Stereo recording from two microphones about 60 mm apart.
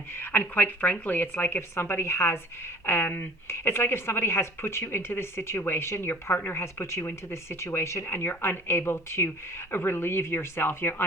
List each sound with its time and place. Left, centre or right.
0.2 s a woman's voice: left